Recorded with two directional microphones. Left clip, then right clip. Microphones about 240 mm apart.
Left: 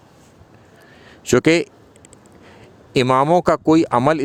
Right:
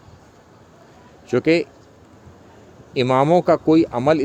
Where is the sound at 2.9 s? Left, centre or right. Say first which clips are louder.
Left 1 dB; left.